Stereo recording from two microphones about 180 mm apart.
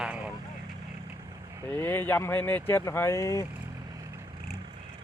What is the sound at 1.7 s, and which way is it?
Speech, 10° left (ahead or behind).